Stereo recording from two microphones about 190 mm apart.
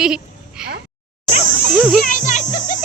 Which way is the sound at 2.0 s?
45° left (ahead or behind).